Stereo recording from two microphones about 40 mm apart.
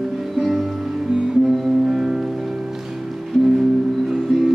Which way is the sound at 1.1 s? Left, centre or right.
Centre.